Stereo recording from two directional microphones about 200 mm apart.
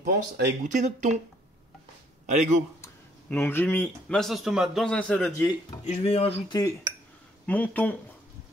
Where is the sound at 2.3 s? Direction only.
35° right (ahead or behind).